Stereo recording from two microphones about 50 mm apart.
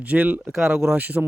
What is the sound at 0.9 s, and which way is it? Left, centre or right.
Speech, right.